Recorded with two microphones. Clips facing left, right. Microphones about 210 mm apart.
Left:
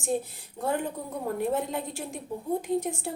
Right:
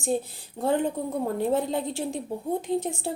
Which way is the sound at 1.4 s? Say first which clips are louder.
Right 3 dB; 30° right (ahead or behind).